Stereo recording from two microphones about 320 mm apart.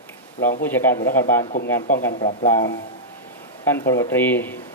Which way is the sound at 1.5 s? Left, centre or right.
Left.